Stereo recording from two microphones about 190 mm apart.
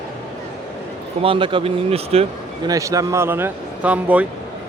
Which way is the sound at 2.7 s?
15° right (ahead or behind).